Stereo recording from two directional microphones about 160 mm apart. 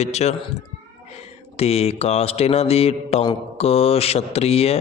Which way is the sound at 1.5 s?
40° left (ahead or behind).